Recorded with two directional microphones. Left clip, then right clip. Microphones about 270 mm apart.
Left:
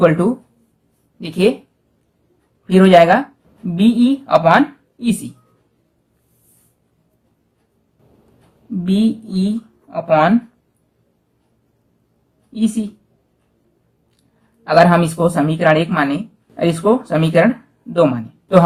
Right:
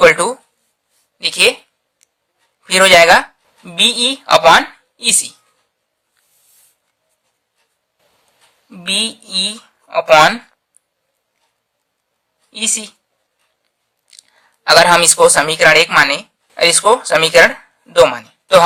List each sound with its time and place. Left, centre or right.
1.2 s speech: right
2.6 s speech: right
8.8 s speech: right
12.5 s a woman's voice: right
14.2 s speech: right